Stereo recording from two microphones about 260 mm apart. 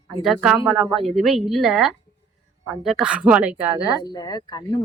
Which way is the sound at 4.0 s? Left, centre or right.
Centre.